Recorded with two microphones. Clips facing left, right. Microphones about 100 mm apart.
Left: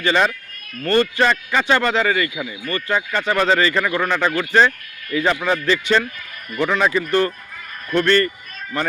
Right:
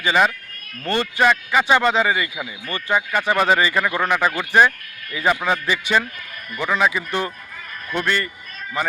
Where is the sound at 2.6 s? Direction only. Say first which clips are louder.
Even; 20° right (ahead or behind).